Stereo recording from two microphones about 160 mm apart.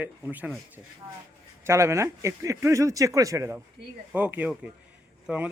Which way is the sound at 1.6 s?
15° right (ahead or behind).